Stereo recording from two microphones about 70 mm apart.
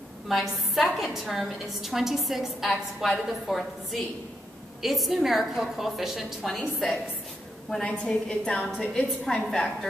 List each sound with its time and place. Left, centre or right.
0.3 s a woman's voice: centre
7.8 s a woman's voice: centre